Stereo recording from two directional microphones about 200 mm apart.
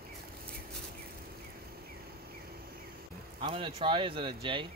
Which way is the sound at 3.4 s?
25° right (ahead or behind).